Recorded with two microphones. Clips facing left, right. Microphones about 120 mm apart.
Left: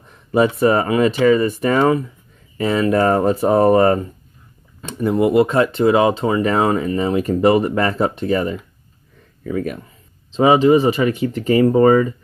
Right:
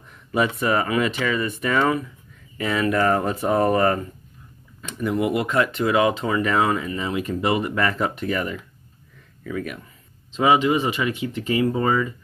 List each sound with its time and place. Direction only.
0.3 s speech: 35° left (ahead or behind)